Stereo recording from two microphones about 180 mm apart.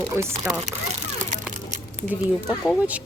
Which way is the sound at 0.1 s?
15° right (ahead or behind).